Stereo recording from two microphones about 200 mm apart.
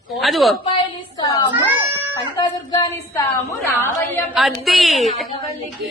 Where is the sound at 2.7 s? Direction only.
20° left (ahead or behind).